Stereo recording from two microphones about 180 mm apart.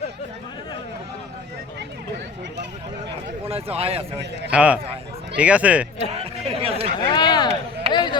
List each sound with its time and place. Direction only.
3.5 s speech: 35° right (ahead or behind)
4.5 s speech: 5° right (ahead or behind)
6.4 s chatter: 35° right (ahead or behind)
7.0 s a sound: 25° left (ahead or behind)
7.9 s chop: 25° left (ahead or behind)